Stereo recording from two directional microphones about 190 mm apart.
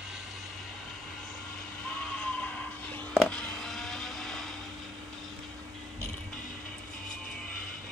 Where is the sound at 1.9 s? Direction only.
5° left (ahead or behind).